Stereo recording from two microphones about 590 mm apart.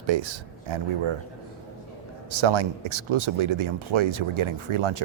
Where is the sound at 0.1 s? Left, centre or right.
Right.